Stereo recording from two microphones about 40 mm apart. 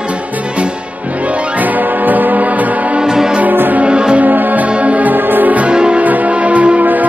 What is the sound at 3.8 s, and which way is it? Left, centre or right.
Music, right.